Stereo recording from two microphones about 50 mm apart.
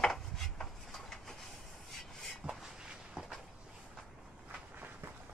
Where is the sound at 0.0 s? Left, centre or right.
Centre.